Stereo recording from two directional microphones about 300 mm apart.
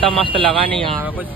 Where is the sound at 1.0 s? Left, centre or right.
Centre.